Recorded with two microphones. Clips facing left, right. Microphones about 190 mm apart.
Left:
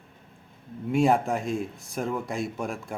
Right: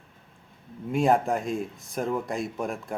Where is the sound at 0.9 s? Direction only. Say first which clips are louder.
Even; centre (ahead or behind).